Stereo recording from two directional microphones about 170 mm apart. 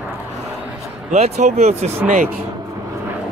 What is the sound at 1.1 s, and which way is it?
Speech, 40° right (ahead or behind).